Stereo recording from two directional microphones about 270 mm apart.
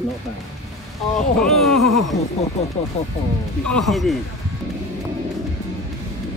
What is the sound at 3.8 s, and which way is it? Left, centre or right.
Speech, centre.